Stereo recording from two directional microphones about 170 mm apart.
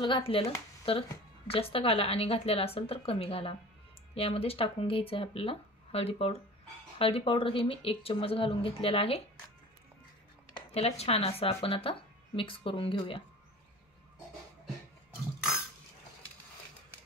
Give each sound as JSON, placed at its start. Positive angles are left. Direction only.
{"t": 0.0, "sound": "speech", "side_deg": 30}
{"t": 10.5, "sound": "speech", "side_deg": 35}